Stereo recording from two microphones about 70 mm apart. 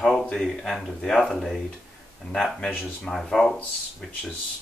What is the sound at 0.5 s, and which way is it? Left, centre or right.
Speech, centre.